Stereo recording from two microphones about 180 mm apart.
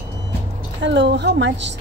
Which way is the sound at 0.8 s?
80° right.